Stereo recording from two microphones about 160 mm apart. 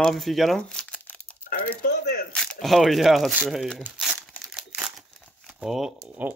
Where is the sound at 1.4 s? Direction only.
65° left (ahead or behind).